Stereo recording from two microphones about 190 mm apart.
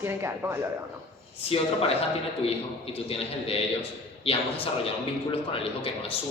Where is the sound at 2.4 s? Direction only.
30° left (ahead or behind).